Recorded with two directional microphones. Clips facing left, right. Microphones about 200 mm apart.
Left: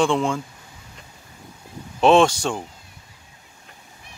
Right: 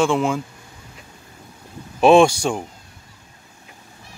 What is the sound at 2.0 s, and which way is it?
Speech, 10° right (ahead or behind).